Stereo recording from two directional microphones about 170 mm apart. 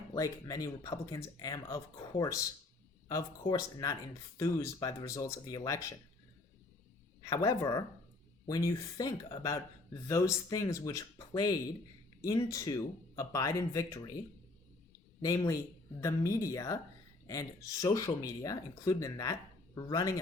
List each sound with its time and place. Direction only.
0.1 s speech: 20° left (ahead or behind)
7.2 s speech: 20° left (ahead or behind)
15.2 s speech: 20° left (ahead or behind)